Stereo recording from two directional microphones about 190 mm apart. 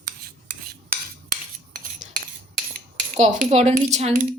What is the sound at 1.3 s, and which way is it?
Cutlery, 50° right (ahead or behind).